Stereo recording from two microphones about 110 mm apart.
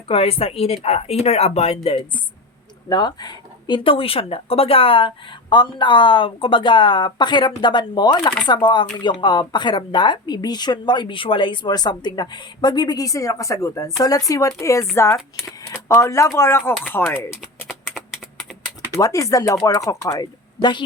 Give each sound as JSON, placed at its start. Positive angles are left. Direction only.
{"t": 0.1, "sound": "speech", "side_deg": 65}
{"t": 2.9, "sound": "speech", "side_deg": 40}
{"t": 17.7, "sound": "typing", "side_deg": 0}
{"t": 18.9, "sound": "speech", "side_deg": 30}